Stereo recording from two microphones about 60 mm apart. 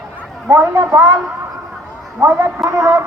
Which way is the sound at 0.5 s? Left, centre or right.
Right.